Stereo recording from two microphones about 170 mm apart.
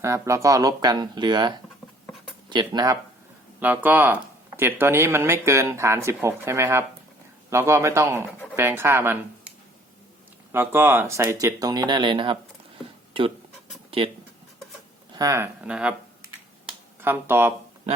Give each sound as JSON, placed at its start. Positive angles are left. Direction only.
{"t": 0.0, "sound": "speech", "side_deg": -20}
{"t": 3.6, "sound": "speech", "side_deg": -10}
{"t": 10.5, "sound": "speech", "side_deg": -15}
{"t": 15.1, "sound": "speech", "side_deg": -20}
{"t": 16.6, "sound": "a sound", "side_deg": -15}